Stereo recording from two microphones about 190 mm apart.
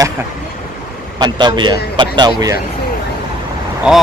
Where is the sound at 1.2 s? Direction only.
25° right (ahead or behind).